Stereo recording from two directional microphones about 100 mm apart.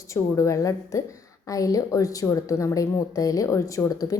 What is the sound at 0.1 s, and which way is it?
A woman's voice, 30° left (ahead or behind).